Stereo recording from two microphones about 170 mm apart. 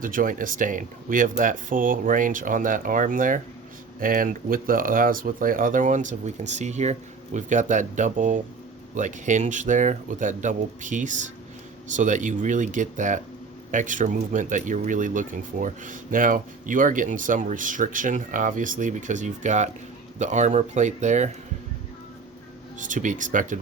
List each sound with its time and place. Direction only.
0.0 s speech: 55° right (ahead or behind)
22.8 s speech: 50° right (ahead or behind)